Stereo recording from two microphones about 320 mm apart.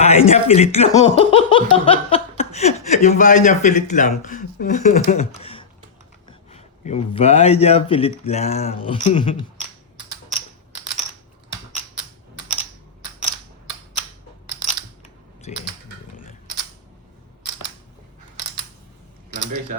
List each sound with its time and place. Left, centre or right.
0.0 s speech: centre
5.4 s typing: centre
6.2 s speech: centre
15.5 s a sound: left